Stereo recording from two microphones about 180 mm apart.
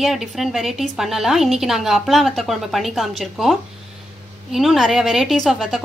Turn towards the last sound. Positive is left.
turn(degrees=0)  # may be behind; listen again after turning